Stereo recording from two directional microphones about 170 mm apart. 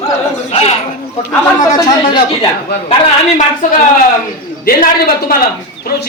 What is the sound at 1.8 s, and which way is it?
Speech, 25° left (ahead or behind).